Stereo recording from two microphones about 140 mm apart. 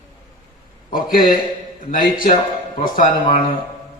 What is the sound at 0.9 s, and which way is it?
A man's voice, 85° left.